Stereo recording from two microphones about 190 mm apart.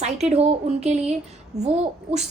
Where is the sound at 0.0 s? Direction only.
35° right (ahead or behind).